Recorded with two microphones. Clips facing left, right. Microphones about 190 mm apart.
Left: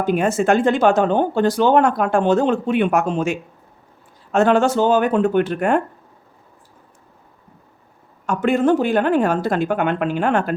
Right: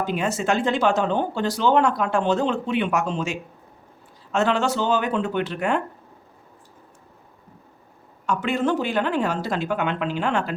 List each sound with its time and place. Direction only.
0.0 s speech: 50° left (ahead or behind)
8.3 s speech: 50° left (ahead or behind)